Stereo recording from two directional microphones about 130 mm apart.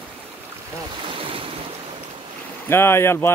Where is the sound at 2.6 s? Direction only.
20° left (ahead or behind).